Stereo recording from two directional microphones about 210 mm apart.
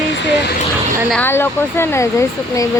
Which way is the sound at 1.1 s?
10° left (ahead or behind).